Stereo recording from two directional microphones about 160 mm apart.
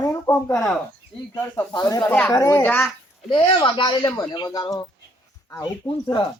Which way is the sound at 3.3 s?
30° left (ahead or behind).